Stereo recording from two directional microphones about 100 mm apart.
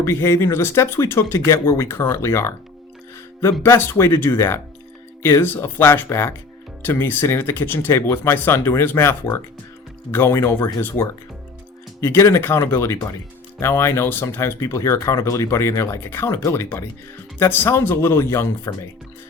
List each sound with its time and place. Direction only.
0.0 s speech: 25° left (ahead or behind)
3.6 s speech: 25° left (ahead or behind)